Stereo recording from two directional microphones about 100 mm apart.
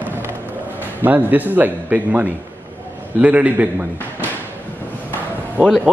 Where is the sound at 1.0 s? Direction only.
20° right (ahead or behind).